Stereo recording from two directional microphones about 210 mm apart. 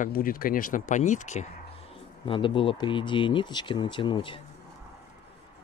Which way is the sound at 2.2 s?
25° left (ahead or behind).